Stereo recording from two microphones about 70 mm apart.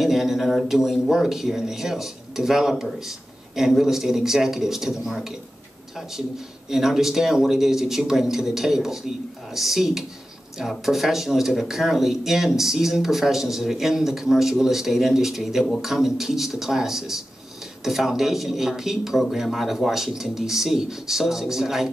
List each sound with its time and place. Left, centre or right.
0.0 s speech: centre
6.7 s speech: centre